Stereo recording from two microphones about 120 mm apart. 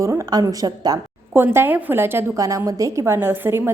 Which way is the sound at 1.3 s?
20° right (ahead or behind).